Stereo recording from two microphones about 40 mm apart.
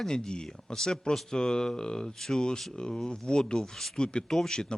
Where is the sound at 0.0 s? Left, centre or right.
Centre.